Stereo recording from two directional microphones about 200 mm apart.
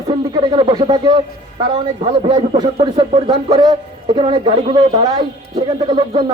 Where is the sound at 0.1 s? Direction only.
20° right (ahead or behind).